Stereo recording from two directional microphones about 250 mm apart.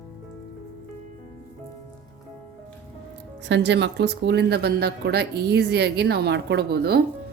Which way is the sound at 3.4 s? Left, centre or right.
Right.